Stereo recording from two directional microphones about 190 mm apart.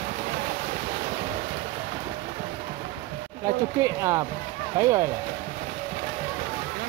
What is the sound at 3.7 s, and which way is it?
Speech, 15° right (ahead or behind).